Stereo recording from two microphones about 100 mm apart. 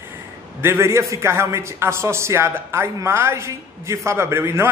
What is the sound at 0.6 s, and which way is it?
A man's voice, 25° right (ahead or behind).